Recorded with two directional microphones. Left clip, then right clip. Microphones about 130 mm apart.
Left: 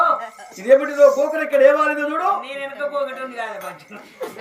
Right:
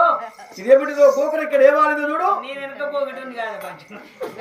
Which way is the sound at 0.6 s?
Centre (ahead or behind).